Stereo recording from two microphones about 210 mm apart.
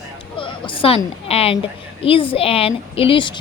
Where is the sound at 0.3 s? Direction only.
25° left (ahead or behind).